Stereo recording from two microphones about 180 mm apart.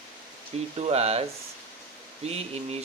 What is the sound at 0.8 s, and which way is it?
Speech, 35° right (ahead or behind).